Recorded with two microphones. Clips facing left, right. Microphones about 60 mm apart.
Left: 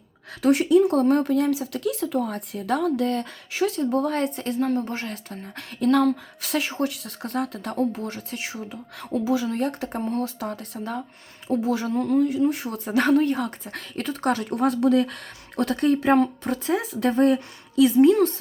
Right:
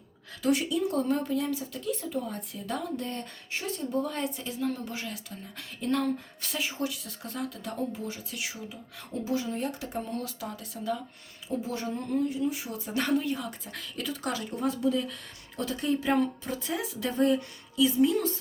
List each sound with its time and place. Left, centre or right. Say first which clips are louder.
0.4 s speech: left 9 dB; left
5.8 s speech: left 9 dB; left
8.7 s speech: left 9 dB; left
11.6 s speech: left 9 dB; left
12.4 s speech: left 8 dB; left